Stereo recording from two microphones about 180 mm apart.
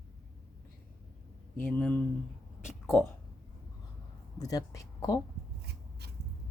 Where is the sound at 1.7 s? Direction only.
10° left (ahead or behind).